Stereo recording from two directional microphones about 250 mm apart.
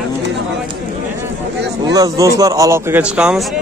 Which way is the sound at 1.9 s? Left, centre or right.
Centre.